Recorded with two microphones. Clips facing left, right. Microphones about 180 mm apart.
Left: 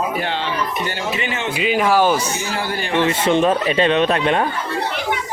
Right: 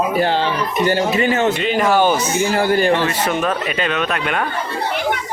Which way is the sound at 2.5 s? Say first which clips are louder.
Right 11 dB; 50° right (ahead or behind).